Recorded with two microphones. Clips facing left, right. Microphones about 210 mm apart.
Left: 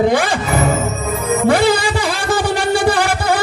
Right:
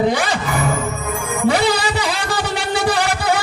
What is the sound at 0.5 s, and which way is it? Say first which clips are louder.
Music: left 3 dB; 25° left (ahead or behind).